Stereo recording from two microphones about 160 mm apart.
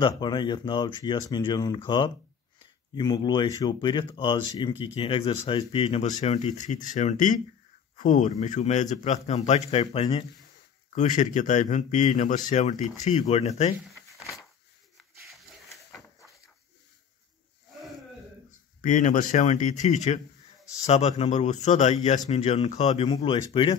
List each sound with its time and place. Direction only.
0.0 s speech: 30° left (ahead or behind)
6.0 s a man's voice: 45° left (ahead or behind)
11.0 s a man's voice: 50° left (ahead or behind)
13.7 s a sound: centre (ahead or behind)
18.8 s a man's voice: 50° left (ahead or behind)
23.0 s speech: 30° left (ahead or behind)